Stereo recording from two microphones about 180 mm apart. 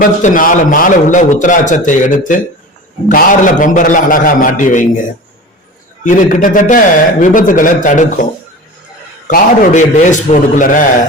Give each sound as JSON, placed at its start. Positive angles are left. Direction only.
{"t": 0.0, "sound": "a man's voice", "side_deg": 45}
{"t": 6.1, "sound": "a man's voice", "side_deg": 45}